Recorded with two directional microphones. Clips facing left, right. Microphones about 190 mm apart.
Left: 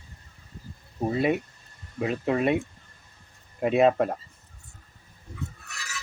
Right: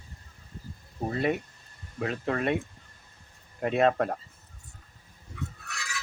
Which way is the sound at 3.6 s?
10° left (ahead or behind).